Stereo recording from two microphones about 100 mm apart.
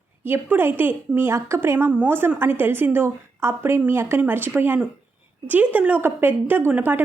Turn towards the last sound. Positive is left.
turn(degrees=-20)  # may be behind; listen again after turning